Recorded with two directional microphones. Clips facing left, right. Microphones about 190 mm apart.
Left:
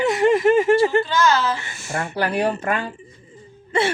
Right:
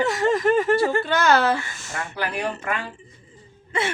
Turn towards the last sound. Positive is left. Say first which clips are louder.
# left 5 dB
turn(degrees=30)  # may be behind; listen again after turning